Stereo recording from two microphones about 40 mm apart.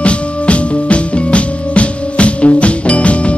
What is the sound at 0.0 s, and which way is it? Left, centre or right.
Music, left.